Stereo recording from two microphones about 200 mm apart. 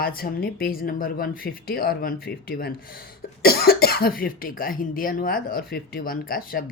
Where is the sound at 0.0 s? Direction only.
45° left (ahead or behind).